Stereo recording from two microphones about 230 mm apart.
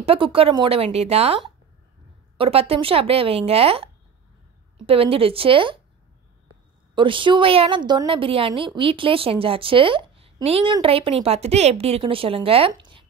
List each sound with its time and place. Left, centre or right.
0.0 s a woman's voice: right
7.0 s a woman's voice: right